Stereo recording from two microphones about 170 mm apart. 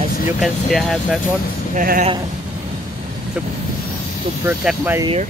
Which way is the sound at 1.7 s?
55° right (ahead or behind).